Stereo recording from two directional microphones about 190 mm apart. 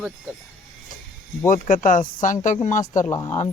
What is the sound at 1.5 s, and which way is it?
Speech, 45° left (ahead or behind).